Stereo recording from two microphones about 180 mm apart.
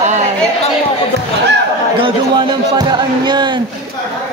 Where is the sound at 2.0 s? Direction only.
25° right (ahead or behind).